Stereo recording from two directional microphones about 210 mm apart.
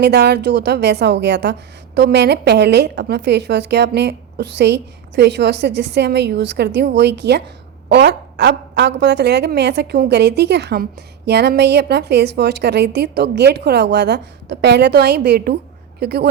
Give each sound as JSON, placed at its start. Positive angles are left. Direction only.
{"t": 0.0, "sound": "a woman's voice", "side_deg": -50}